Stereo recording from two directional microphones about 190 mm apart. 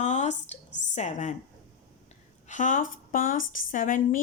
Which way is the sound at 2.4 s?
40° left (ahead or behind).